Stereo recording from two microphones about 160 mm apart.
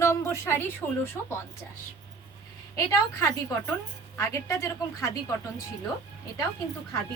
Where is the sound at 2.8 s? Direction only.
20° left (ahead or behind).